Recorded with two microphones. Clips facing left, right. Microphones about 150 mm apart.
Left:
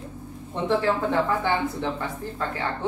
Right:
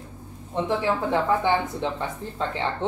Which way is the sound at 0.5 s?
15° right (ahead or behind).